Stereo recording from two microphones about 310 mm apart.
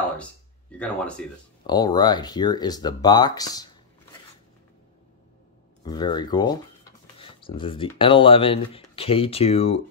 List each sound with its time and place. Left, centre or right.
0.2 s a sound: centre
1.7 s speech: centre
5.9 s speech: centre